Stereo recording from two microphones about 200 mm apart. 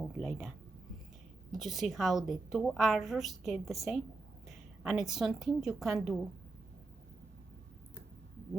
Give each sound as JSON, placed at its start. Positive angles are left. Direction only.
{"t": 0.2, "sound": "a woman's voice", "side_deg": 0}
{"t": 1.5, "sound": "a woman's voice", "side_deg": 0}